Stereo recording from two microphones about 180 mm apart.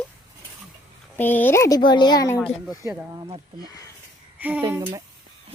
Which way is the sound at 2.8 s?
15° right (ahead or behind).